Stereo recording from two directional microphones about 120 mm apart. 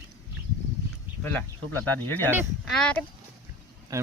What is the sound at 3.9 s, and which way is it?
Speech, 25° right (ahead or behind).